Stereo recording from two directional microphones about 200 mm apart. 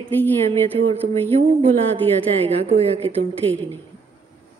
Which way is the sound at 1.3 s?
30° right (ahead or behind).